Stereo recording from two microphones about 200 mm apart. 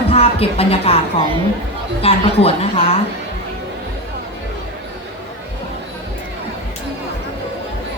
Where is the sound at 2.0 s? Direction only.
30° left (ahead or behind).